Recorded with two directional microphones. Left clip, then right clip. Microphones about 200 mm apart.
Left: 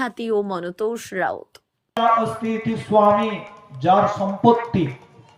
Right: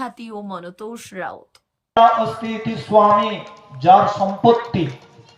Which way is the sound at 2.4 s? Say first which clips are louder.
Left 1 dB; 55° left (ahead or behind).